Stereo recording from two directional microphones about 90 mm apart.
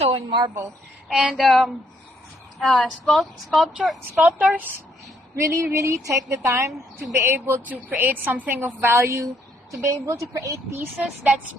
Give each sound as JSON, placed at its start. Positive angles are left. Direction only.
{"t": 0.1, "sound": "a woman's voice", "side_deg": -60}
{"t": 1.0, "sound": "a woman's voice", "side_deg": 0}
{"t": 4.2, "sound": "a woman's voice", "side_deg": -15}
{"t": 5.4, "sound": "a woman's voice", "side_deg": -35}
{"t": 10.9, "sound": "a woman's voice", "side_deg": -20}